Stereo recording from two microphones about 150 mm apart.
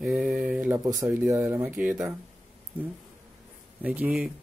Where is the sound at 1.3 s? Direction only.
10° right (ahead or behind).